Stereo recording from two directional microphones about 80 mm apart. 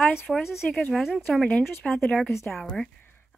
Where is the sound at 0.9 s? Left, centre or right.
Centre.